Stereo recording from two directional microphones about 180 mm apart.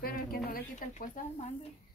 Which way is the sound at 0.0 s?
55° left (ahead or behind).